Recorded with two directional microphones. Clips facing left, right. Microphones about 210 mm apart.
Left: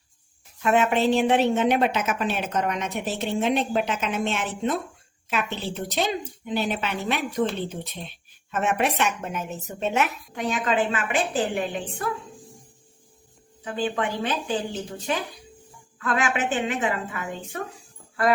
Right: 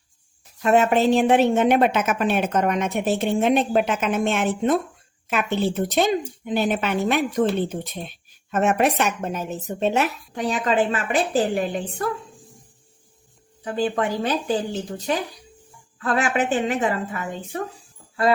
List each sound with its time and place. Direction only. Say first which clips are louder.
0.6 s a woman's voice: right 3 dB; 40° right (ahead or behind)
8.4 s a woman's voice: right 5 dB; 40° right (ahead or behind)
13.7 s a woman's voice: right 4 dB; 40° right (ahead or behind)